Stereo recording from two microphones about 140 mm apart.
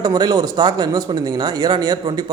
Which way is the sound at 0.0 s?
30° right (ahead or behind).